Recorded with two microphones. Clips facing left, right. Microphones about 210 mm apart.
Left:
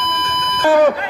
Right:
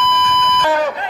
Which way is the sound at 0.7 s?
55° left (ahead or behind).